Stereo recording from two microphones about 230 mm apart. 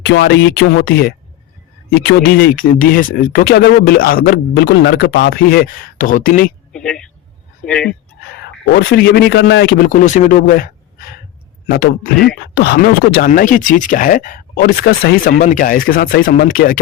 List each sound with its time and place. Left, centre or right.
0.0 s speech: left
6.7 s speech: centre
8.7 s speech: left
11.7 s speech: left